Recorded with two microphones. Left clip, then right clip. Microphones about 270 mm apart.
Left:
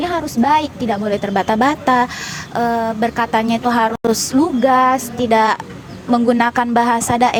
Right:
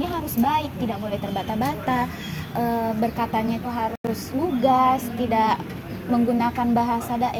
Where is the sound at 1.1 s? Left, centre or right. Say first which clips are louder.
Left 10 dB; left.